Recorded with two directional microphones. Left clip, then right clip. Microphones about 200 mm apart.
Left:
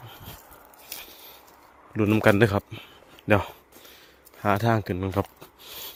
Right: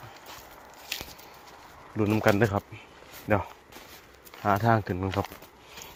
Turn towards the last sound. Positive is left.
turn(degrees=30)  # may be behind; listen again after turning